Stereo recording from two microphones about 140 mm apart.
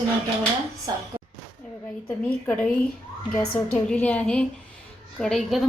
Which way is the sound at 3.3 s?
5° left (ahead or behind).